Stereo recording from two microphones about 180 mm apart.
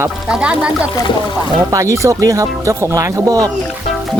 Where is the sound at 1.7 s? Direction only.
15° right (ahead or behind).